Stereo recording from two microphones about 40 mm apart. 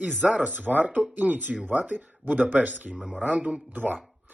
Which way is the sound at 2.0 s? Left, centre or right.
Right.